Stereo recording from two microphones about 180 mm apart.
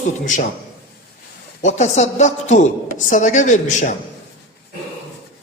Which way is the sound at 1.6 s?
40° left (ahead or behind).